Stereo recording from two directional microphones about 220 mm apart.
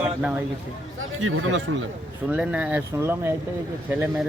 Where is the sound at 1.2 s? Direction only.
70° right (ahead or behind).